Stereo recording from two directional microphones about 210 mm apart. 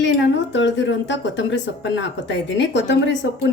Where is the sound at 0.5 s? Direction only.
60° left (ahead or behind).